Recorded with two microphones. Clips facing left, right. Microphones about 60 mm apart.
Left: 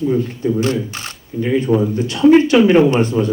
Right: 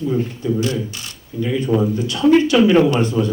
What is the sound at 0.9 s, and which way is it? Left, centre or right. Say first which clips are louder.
Speech: left 4 dB; left.